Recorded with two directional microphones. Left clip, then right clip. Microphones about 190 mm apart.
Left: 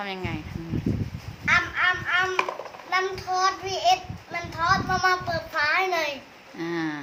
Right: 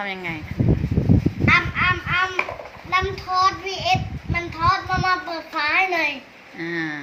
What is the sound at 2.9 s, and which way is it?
Child singing, 25° left (ahead or behind).